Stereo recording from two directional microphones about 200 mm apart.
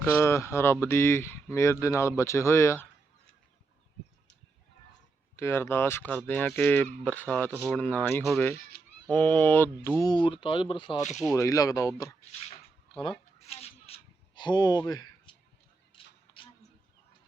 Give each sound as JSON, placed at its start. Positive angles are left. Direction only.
{"t": 0.0, "sound": "speech", "side_deg": 15}
{"t": 5.4, "sound": "speech", "side_deg": 10}
{"t": 12.9, "sound": "a sound", "side_deg": 25}